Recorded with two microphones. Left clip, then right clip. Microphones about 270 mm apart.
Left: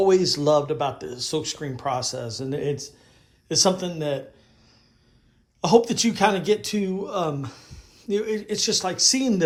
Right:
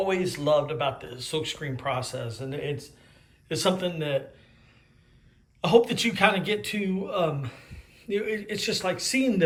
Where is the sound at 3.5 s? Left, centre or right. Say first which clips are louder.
Left 4 dB; centre.